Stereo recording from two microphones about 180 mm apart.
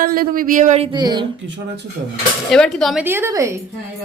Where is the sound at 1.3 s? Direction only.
80° right.